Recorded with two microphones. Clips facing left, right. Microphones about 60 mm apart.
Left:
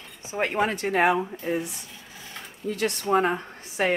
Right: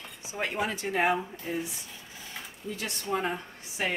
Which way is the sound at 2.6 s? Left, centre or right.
Left.